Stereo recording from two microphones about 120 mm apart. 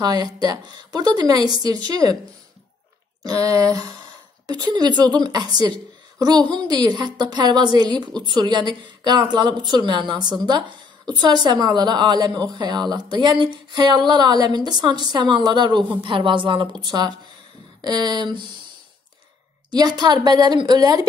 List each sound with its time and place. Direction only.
0.0 s a woman's voice: 35° right (ahead or behind)
3.3 s a woman's voice: 30° right (ahead or behind)
19.7 s a woman's voice: 35° right (ahead or behind)